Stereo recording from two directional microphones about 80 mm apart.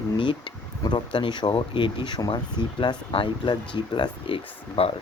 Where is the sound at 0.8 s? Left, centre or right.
Left.